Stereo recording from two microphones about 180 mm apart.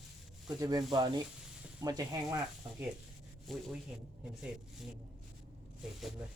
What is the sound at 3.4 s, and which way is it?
Speech, centre (ahead or behind).